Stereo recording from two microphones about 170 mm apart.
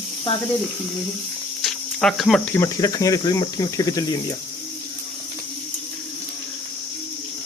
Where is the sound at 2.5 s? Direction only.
20° left (ahead or behind).